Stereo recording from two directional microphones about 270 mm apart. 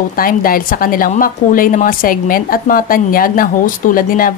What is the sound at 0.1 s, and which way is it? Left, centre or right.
A woman's voice, left.